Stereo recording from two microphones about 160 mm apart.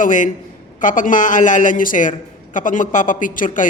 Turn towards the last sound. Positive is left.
turn(degrees=55)  # may be behind; listen again after turning